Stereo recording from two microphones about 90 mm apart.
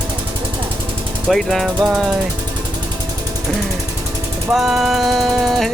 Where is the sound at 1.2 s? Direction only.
Centre (ahead or behind).